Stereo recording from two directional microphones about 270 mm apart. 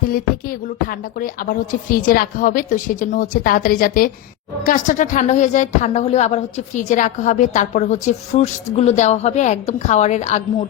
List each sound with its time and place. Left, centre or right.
0.1 s a woman's voice: left